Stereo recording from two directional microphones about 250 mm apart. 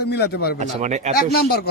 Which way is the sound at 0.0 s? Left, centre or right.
Left.